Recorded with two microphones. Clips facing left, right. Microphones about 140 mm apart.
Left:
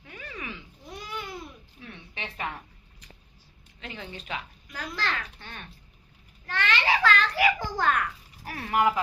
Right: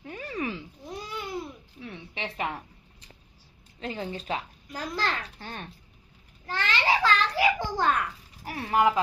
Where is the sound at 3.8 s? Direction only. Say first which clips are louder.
Right 7 dB; 35° right (ahead or behind).